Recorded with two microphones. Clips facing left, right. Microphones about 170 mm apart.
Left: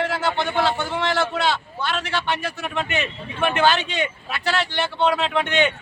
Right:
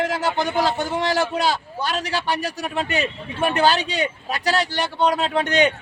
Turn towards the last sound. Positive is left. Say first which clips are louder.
# right 2 dB
turn(degrees=-40)  # may be behind; listen again after turning